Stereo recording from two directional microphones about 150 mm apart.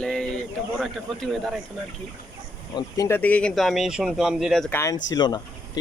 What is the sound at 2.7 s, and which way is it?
Speech, 30° left (ahead or behind).